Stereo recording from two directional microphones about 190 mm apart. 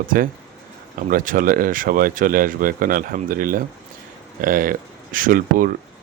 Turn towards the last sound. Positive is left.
turn(degrees=-45)  # may be behind; listen again after turning